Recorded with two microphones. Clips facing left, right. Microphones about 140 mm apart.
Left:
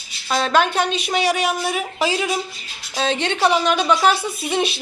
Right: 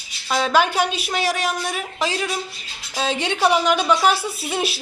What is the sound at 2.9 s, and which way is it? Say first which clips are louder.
A woman's voice: left 2 dB; 10° right (ahead or behind).